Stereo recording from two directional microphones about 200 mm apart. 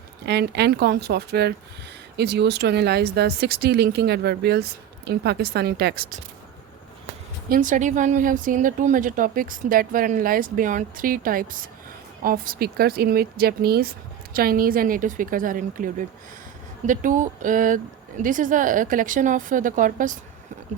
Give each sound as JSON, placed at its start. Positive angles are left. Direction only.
{"t": 0.3, "sound": "speech", "side_deg": -55}
{"t": 7.5, "sound": "a woman's voice", "side_deg": -40}